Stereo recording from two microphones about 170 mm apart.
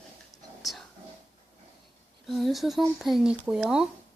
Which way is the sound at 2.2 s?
Centre (ahead or behind).